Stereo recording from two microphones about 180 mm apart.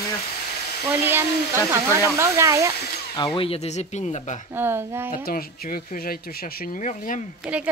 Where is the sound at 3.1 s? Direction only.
25° left (ahead or behind).